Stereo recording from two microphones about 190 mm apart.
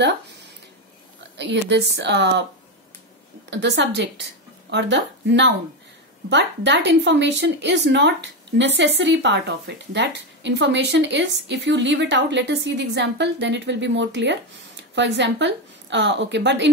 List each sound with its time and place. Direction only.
1.4 s a woman's voice: 65° right (ahead or behind)
3.4 s a woman's voice: 65° right (ahead or behind)